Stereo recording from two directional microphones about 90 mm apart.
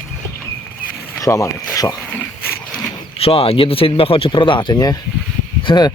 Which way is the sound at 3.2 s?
90° left.